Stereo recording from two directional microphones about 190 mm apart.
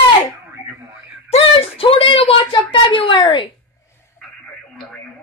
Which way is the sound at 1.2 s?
30° left (ahead or behind).